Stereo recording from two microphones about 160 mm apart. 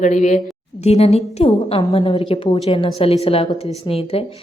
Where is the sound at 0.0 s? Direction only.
50° left (ahead or behind).